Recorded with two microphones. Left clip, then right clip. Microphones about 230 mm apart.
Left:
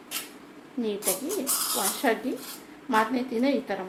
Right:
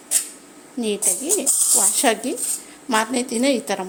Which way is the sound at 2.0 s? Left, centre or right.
Right.